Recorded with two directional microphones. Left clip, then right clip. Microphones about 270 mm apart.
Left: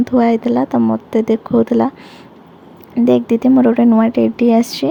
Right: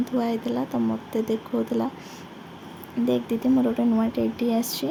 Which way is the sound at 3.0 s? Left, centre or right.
Left.